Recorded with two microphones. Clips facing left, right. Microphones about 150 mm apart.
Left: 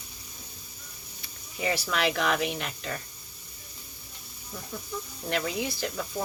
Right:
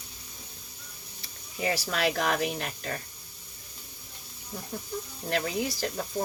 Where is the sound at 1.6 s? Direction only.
40° right (ahead or behind).